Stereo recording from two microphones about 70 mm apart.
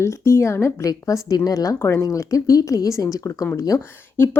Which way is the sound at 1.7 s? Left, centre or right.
Left.